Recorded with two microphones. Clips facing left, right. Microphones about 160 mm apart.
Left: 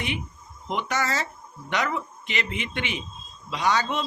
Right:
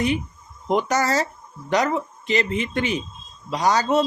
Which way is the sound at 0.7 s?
40° right (ahead or behind).